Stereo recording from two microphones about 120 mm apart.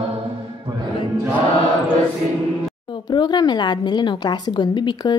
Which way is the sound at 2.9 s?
35° left (ahead or behind).